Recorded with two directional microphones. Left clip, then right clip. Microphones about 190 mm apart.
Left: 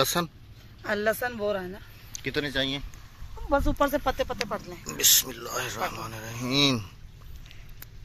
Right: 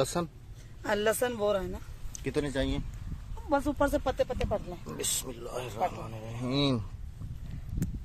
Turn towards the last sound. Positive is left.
turn(degrees=0)  # may be behind; listen again after turning